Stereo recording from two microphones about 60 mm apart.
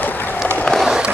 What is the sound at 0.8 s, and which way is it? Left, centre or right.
Skateboard, centre.